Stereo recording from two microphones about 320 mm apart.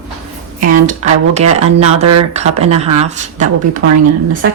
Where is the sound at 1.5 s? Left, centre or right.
Right.